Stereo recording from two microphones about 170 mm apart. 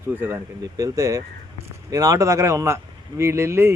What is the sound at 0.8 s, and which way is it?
Speech, 20° right (ahead or behind).